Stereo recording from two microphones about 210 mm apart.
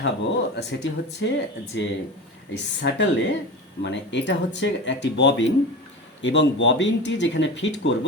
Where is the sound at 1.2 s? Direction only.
55° left (ahead or behind).